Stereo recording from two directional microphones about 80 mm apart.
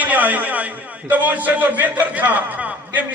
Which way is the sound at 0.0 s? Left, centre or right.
Right.